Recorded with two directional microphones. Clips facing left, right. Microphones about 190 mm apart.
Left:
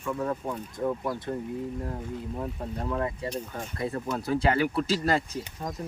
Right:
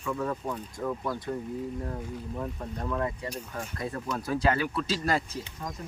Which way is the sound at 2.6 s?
25° left (ahead or behind).